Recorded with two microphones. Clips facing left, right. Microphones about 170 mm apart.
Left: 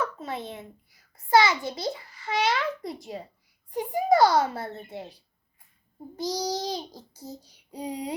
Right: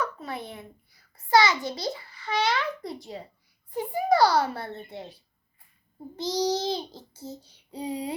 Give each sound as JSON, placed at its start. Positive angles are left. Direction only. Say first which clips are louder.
{"t": 0.0, "sound": "a child's voice", "louder": "left 1 dB", "side_deg": 20}
{"t": 6.1, "sound": "child singing", "louder": "right 3 dB", "side_deg": 15}